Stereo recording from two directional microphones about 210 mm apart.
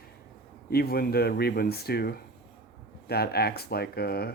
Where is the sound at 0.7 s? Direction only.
45° left (ahead or behind).